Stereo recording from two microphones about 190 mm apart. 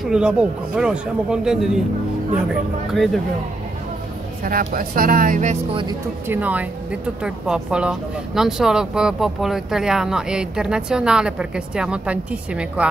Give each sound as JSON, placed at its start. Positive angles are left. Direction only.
{"t": 0.0, "sound": "speech", "side_deg": -5}
{"t": 2.9, "sound": "speech", "side_deg": 0}
{"t": 4.5, "sound": "speech", "side_deg": -50}
{"t": 6.2, "sound": "speech", "side_deg": -10}